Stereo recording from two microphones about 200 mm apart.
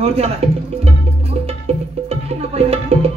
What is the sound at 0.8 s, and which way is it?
Music, 30° right (ahead or behind).